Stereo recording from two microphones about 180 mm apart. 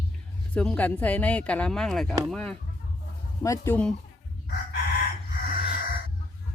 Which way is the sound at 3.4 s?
15° left (ahead or behind).